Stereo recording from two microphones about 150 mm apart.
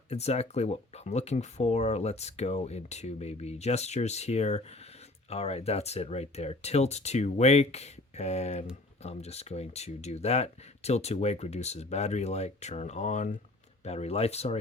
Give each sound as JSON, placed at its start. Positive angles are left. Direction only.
{"t": 0.1, "sound": "speech", "side_deg": 45}